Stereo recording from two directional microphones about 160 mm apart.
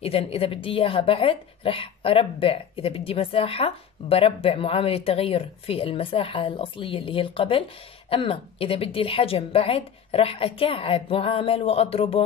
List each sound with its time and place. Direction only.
0.0 s a woman's voice: 40° left (ahead or behind)